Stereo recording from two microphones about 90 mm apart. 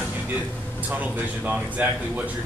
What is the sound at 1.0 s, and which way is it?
A man's voice, 15° right (ahead or behind).